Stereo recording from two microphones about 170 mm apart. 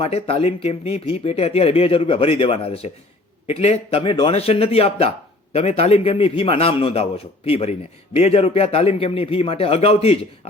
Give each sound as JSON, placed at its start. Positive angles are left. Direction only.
{"t": 0.0, "sound": "a man's voice", "side_deg": 35}